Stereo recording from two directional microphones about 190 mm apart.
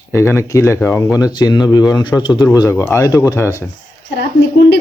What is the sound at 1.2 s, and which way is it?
Speech, 20° left (ahead or behind).